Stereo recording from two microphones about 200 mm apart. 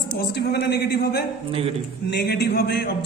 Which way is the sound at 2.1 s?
55° left (ahead or behind).